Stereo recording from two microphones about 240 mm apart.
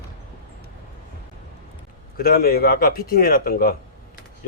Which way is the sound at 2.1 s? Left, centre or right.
Left.